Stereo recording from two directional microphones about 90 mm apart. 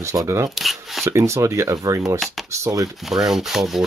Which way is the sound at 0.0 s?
35° right (ahead or behind).